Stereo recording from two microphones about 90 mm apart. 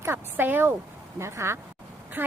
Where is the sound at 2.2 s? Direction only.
20° right (ahead or behind).